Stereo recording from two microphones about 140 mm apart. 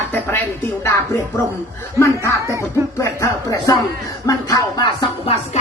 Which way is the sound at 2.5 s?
20° right (ahead or behind).